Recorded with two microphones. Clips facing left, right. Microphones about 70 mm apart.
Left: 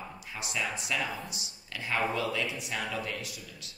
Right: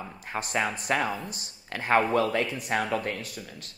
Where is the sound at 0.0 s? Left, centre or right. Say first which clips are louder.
Right 6 dB; right.